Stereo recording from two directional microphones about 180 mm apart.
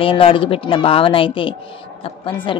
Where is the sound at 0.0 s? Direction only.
30° left (ahead or behind).